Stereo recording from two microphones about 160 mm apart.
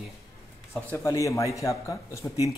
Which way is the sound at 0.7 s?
15° left (ahead or behind).